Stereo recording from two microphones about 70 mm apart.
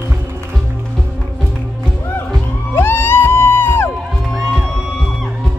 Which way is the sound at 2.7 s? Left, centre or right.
Left.